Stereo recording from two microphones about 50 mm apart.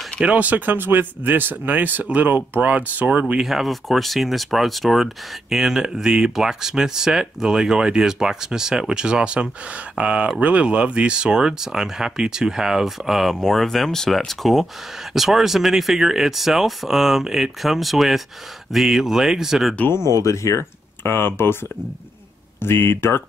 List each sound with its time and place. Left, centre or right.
0.2 s speech: right
3.4 s speech: centre
20.2 s speech: left
21.0 s speech: left
22.6 s speech: left